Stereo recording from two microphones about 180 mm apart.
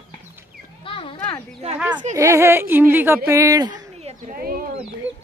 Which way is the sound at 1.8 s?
10° right (ahead or behind).